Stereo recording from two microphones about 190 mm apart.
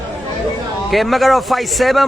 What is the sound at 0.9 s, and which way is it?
A man's voice, centre (ahead or behind).